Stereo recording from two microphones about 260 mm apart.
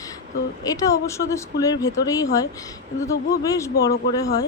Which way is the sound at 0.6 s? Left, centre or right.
Centre.